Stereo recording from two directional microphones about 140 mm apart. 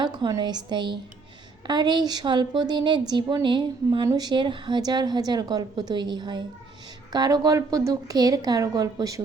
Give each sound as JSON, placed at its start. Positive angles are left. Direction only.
{"t": 0.0, "sound": "a woman's voice", "side_deg": -30}